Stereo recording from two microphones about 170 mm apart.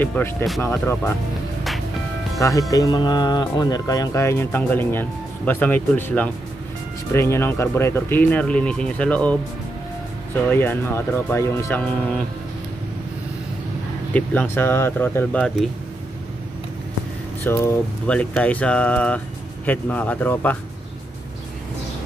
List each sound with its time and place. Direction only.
0.0 s speech: 10° left (ahead or behind)
2.7 s speech: 20° left (ahead or behind)
14.1 s speech: 10° left (ahead or behind)
17.4 s speech: 10° left (ahead or behind)